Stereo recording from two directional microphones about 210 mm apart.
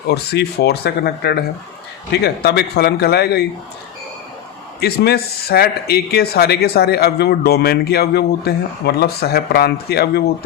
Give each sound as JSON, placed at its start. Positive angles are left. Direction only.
{"t": 0.1, "sound": "speech", "side_deg": 50}
{"t": 4.8, "sound": "speech", "side_deg": 50}